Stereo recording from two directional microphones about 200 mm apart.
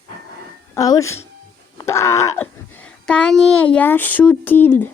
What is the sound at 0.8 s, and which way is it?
A child's voice, 15° left (ahead or behind).